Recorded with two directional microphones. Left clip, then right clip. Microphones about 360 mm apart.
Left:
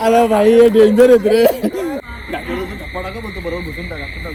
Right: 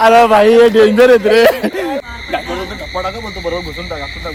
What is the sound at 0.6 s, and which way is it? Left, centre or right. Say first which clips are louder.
Speech: right 2 dB; centre.